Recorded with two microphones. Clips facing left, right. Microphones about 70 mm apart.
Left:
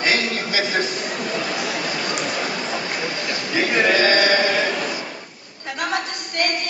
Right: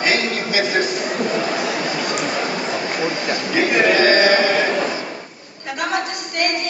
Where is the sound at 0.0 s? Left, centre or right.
Right.